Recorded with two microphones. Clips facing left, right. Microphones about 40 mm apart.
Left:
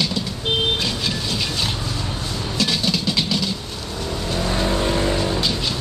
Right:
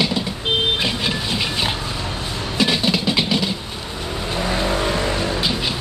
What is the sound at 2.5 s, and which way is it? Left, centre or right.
Train, right.